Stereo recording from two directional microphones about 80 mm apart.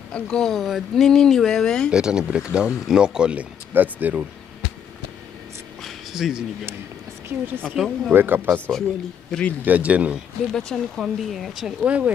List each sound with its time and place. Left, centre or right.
0.1 s speech: centre
1.9 s speech: centre
5.8 s a sound: centre
7.2 s speech: right
7.7 s speech: centre
8.1 s speech: right
9.3 s a man's voice: centre
9.7 s speech: centre
10.5 s a man's voice: centre
11.8 s speech: centre